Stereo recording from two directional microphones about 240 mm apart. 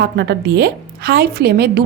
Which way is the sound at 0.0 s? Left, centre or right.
Right.